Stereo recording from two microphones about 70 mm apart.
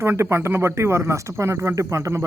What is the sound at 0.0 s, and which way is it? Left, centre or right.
Speech, right.